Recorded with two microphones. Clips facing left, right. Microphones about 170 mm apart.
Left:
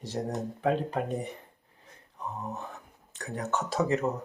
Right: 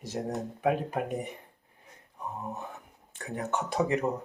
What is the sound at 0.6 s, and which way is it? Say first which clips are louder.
Speech: even; 10° right (ahead or behind).